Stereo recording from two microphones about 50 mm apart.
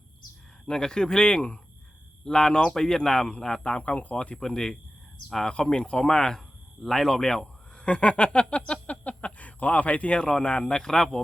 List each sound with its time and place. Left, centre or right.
0.7 s speech: centre